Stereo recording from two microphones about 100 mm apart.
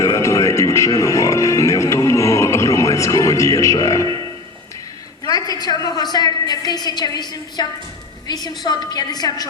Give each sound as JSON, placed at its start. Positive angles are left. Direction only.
{"t": 0.0, "sound": "music", "side_deg": 30}
{"t": 3.8, "sound": "a man's voice", "side_deg": 35}
{"t": 5.3, "sound": "a woman's voice", "side_deg": 40}